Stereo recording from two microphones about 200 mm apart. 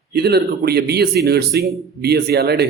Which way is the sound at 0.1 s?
55° right (ahead or behind).